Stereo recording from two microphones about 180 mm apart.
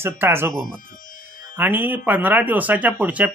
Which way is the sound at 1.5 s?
10° right (ahead or behind).